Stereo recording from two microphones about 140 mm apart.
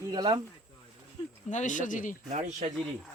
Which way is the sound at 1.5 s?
65° left (ahead or behind).